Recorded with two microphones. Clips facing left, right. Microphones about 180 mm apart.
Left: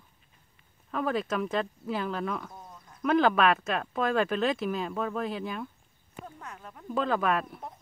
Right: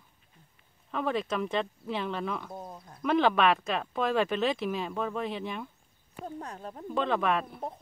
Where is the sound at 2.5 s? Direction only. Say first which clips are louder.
Right 6 dB; 35° right (ahead or behind).